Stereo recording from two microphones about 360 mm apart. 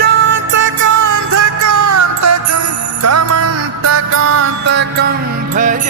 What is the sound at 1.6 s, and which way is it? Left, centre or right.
Music, right.